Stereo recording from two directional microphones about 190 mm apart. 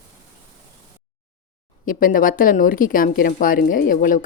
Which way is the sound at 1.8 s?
45° left (ahead or behind).